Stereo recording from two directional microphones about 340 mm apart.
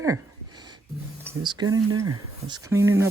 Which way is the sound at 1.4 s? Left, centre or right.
Centre.